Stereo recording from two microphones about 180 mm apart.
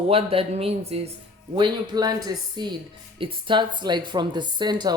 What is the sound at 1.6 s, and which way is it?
Speech, 20° right (ahead or behind).